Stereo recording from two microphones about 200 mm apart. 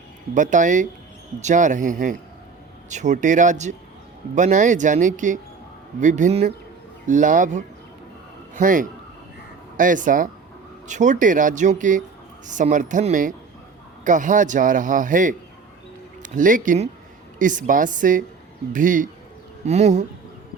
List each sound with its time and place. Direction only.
0.3 s a man's voice: 40° right (ahead or behind)